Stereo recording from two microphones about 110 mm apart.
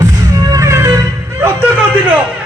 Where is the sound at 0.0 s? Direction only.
30° right (ahead or behind).